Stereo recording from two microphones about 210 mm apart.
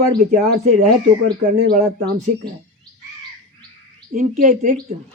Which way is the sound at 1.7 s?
35° right (ahead or behind).